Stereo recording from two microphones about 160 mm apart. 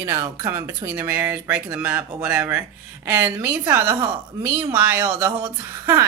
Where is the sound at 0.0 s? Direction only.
20° right (ahead or behind).